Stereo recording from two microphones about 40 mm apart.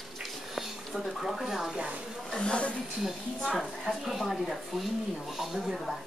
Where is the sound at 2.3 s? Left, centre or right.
Left.